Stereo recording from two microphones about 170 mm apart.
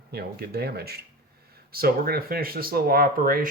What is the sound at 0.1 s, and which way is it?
Speech, 65° right (ahead or behind).